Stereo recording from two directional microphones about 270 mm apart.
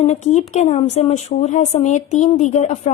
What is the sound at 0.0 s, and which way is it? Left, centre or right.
Speech, left.